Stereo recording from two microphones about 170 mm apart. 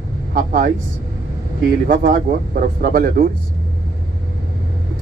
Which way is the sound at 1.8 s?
55° right (ahead or behind).